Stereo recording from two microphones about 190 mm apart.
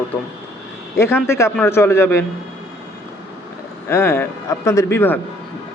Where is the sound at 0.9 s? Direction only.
15° left (ahead or behind).